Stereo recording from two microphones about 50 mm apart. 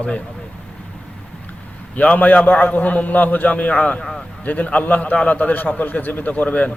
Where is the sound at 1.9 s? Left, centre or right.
Left.